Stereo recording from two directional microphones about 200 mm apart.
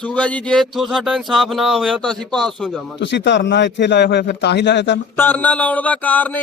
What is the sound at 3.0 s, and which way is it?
A man's voice, 60° left (ahead or behind).